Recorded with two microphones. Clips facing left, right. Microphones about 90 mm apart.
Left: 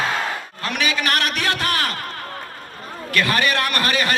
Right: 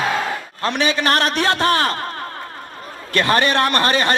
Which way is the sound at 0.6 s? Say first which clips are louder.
Right 4 dB; 30° right (ahead or behind).